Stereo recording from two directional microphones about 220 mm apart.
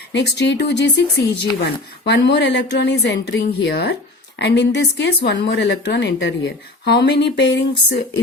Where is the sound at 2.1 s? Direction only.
50° left (ahead or behind).